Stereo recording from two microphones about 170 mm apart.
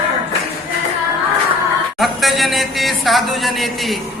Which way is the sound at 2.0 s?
Centre (ahead or behind).